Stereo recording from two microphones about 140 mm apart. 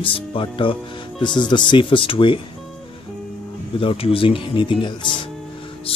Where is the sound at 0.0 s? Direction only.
40° left (ahead or behind).